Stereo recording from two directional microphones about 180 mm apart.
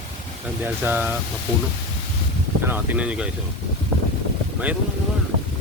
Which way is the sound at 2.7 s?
10° right (ahead or behind).